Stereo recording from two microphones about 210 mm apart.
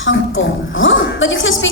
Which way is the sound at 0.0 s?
65° left (ahead or behind).